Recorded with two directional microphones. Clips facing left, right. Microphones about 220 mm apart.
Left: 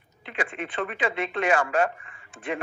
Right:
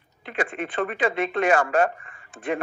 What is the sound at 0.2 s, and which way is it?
Speech, 45° right (ahead or behind).